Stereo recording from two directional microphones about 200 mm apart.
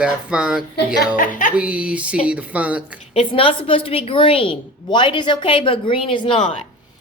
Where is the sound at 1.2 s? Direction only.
40° left (ahead or behind).